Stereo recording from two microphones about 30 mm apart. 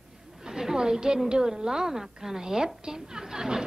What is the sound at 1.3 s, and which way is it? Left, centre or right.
A woman's voice, right.